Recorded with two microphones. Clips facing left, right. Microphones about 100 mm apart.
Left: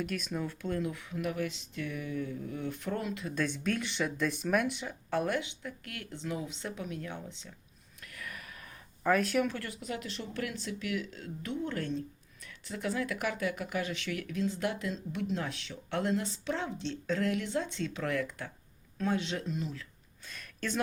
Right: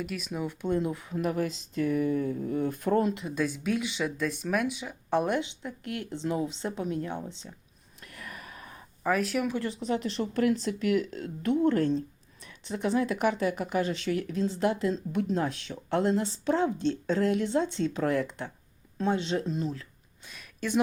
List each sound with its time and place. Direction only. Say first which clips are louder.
0.0 s speech: right 1 dB; 5° right (ahead or behind)
0.4 s speech: right 10 dB; 20° right (ahead or behind)
3.2 s speech: right 3 dB; 10° right (ahead or behind)
5.1 s speech: right 5 dB; 20° right (ahead or behind)
8.0 s a sound: right 2 dB; 30° right (ahead or behind)
9.0 s speech: even; centre (ahead or behind)
9.5 s speech: right 8 dB; 25° right (ahead or behind)
12.5 s speech: right 6 dB; 20° right (ahead or behind); by 16.0 s 40° right (ahead or behind)
16.0 s speech: right 5 dB; 30° right (ahead or behind)
20.2 s a sound: right 3 dB; 10° right (ahead or behind)